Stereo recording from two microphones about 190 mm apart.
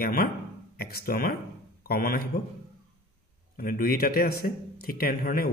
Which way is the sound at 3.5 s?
50° left (ahead or behind).